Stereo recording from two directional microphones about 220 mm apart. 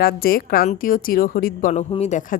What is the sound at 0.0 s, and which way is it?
Speech, 45° left (ahead or behind).